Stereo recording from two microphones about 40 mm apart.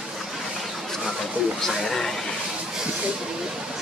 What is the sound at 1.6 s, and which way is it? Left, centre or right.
Speech, centre.